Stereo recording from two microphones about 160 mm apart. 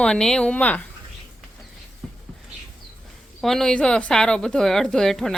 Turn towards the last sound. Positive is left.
turn(degrees=0)  # may be behind; listen again after turning